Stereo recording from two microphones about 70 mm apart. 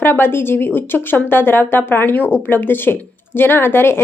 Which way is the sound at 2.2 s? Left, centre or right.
Centre.